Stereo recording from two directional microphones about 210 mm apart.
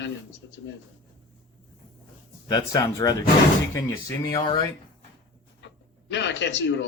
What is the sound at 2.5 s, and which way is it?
Speech, 15° left (ahead or behind).